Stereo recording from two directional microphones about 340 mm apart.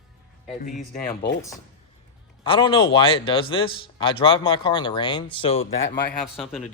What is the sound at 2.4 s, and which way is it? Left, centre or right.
A man's voice, centre.